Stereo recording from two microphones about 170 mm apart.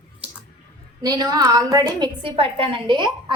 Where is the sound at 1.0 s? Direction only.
20° right (ahead or behind).